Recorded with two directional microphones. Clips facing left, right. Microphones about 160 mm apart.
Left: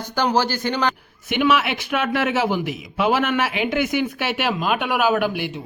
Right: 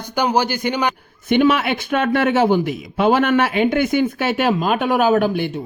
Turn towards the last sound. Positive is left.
turn(degrees=-40)  # may be behind; listen again after turning